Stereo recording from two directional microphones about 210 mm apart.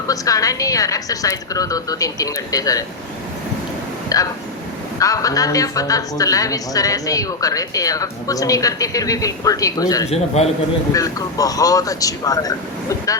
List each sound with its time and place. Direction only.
0.1 s a woman's voice: 15° left (ahead or behind)
4.1 s a woman's voice: 15° left (ahead or behind)
10.1 s a man's voice: 30° left (ahead or behind)
10.9 s a woman's voice: 15° left (ahead or behind)